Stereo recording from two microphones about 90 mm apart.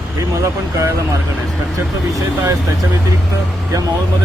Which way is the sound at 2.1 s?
40° right (ahead or behind).